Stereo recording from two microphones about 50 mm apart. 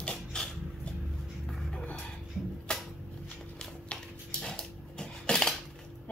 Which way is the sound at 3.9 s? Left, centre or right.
Centre.